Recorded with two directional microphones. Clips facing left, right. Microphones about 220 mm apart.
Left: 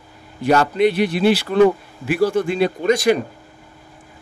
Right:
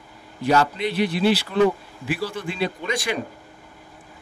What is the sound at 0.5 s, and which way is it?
Speech, 55° left (ahead or behind).